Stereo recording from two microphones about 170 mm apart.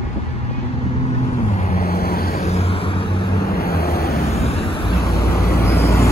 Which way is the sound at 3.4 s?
65° left (ahead or behind).